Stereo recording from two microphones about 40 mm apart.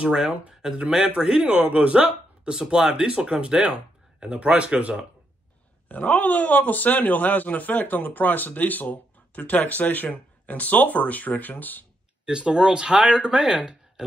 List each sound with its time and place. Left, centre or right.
0.0 s speech: right
2.5 s speech: centre
6.0 s speech: left
12.3 s speech: right